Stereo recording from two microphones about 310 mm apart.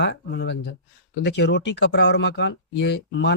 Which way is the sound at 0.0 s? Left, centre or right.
Left.